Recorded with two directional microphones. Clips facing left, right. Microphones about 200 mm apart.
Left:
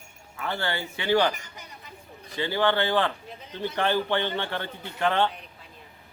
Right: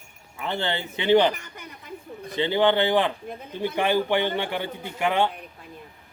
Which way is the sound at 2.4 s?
20° right (ahead or behind).